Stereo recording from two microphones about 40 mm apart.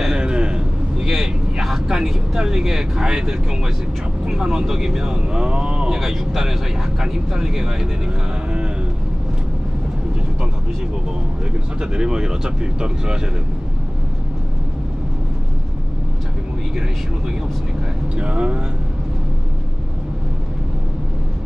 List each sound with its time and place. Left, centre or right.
0.2 s vehicle: right
0.9 s vehicle: centre
2.0 s speech: centre
5.9 s speech: centre
11.8 s speech: centre
18.1 s speech: right